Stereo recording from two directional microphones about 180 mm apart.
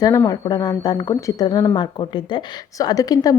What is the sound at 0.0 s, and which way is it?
A woman's voice, 15° left (ahead or behind).